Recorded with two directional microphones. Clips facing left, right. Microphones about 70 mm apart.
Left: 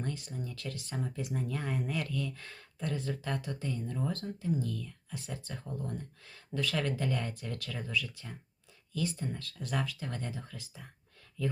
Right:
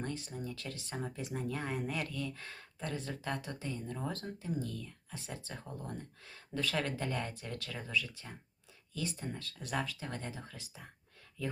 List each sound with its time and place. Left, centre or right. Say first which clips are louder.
0.0 s speech: left 1 dB; right